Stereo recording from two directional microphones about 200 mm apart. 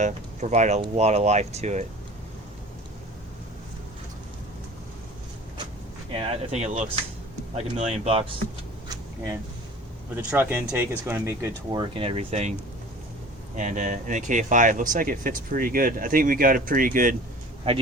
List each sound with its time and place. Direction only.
0.0 s speech: 35° right (ahead or behind)
6.1 s speech: 35° right (ahead or behind)
10.2 s speech: 10° right (ahead or behind); by 12.5 s 35° right (ahead or behind)
13.6 s speech: 40° right (ahead or behind)